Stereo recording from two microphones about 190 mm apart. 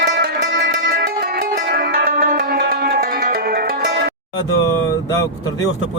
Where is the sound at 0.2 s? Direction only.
50° right (ahead or behind).